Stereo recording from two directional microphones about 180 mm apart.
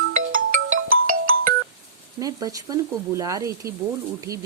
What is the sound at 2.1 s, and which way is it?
Speech, 20° right (ahead or behind).